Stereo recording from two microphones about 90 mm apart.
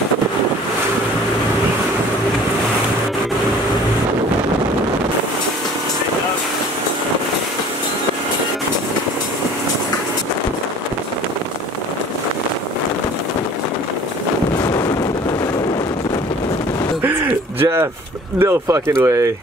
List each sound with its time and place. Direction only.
18.4 s speech: 35° right (ahead or behind)